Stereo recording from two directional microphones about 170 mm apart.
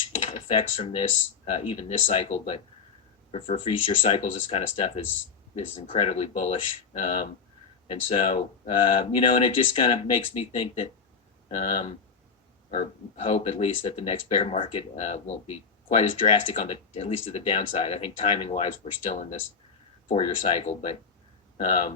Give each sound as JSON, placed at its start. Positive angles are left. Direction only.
{"t": 0.3, "sound": "speech", "side_deg": 40}
{"t": 20.4, "sound": "speech", "side_deg": 40}